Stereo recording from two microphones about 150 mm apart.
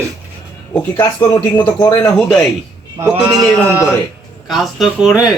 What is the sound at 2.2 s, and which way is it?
Speech, 5° left (ahead or behind).